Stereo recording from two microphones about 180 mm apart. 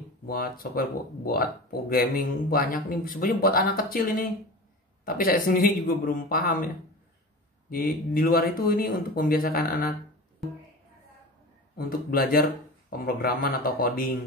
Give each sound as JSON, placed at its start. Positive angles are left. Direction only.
{"t": 0.3, "sound": "speech", "side_deg": 55}
{"t": 7.7, "sound": "speech", "side_deg": 55}
{"t": 11.7, "sound": "speech", "side_deg": 55}